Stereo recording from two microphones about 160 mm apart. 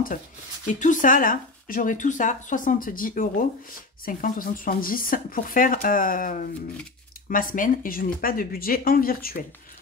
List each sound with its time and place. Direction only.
0.7 s speech: 55° left (ahead or behind)